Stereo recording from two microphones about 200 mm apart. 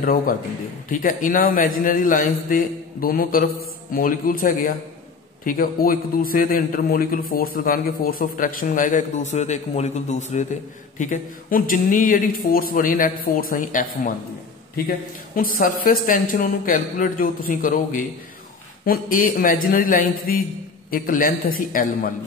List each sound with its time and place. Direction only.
0.0 s a man's voice: 45° left (ahead or behind)
15.3 s a man's voice: 45° left (ahead or behind)